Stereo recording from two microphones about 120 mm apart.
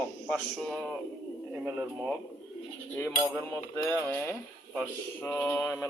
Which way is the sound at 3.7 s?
20° left (ahead or behind).